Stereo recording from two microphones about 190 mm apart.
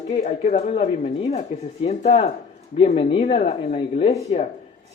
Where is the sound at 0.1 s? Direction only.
35° left (ahead or behind).